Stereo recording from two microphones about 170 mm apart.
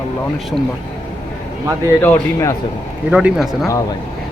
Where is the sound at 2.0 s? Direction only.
15° left (ahead or behind).